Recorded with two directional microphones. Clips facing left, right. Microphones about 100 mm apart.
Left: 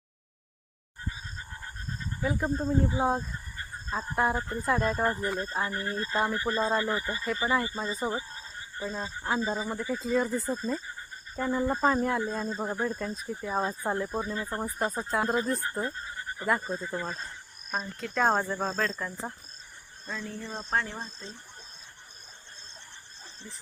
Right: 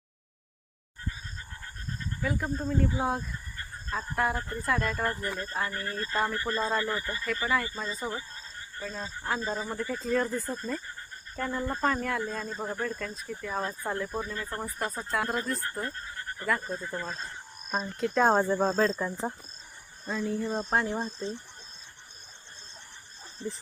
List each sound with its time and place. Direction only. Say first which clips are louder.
2.2 s speech: left 2 dB; 25° left (ahead or behind)
11.9 s speech: left 3 dB; 25° left (ahead or behind); by 17.2 s 5° left (ahead or behind)
18.0 s speech: right 3 dB; 5° right (ahead or behind)
18.8 s speech: right 5 dB; 20° right (ahead or behind)
20.7 s speech: even; 30° right (ahead or behind)